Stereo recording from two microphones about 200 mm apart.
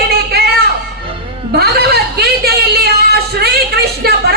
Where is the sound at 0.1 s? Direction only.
50° right (ahead or behind).